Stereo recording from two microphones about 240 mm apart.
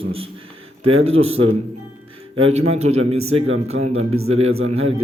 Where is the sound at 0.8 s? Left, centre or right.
Right.